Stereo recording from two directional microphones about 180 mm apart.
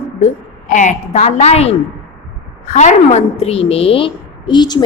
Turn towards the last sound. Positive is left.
turn(degrees=25)  # may be behind; listen again after turning